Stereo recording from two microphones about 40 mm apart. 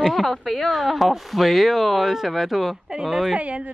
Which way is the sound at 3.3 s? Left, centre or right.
Right.